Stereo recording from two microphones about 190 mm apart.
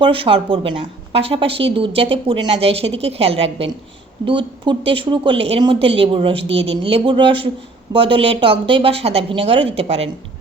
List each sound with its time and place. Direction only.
0.0 s speech: 30° right (ahead or behind)